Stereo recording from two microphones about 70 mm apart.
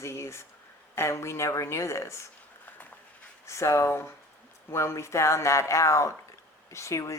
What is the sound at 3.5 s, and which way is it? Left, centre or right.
Speech, left.